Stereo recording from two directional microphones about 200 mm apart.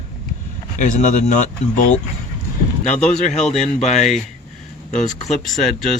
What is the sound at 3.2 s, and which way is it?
Speech, 35° left (ahead or behind).